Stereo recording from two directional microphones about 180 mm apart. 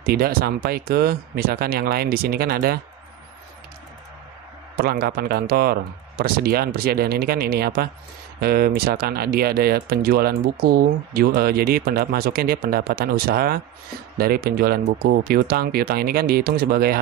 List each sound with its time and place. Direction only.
0.0 s speech: 55° right (ahead or behind)
4.7 s speech: 55° right (ahead or behind)